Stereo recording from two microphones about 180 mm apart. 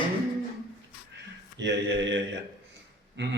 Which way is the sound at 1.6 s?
80° right.